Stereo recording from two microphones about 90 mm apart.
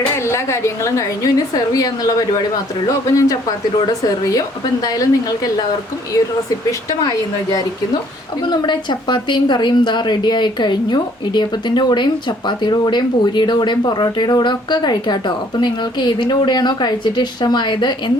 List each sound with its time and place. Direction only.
0.2 s a woman's voice: 30° left (ahead or behind)
6.7 s speech: 40° left (ahead or behind)
8.4 s a woman's voice: 55° left (ahead or behind)